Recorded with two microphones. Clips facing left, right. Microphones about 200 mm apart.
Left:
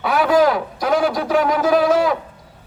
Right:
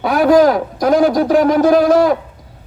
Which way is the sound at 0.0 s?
40° right (ahead or behind).